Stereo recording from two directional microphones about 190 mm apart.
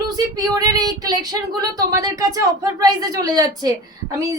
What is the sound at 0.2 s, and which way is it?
A woman's voice, 20° right (ahead or behind).